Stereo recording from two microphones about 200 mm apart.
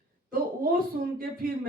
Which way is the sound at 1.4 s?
45° right (ahead or behind).